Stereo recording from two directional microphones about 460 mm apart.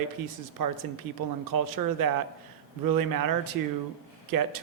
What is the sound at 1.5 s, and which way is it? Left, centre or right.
Speech, right.